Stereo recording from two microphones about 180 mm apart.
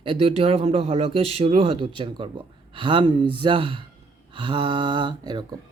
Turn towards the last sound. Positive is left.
turn(degrees=-25)  # may be behind; listen again after turning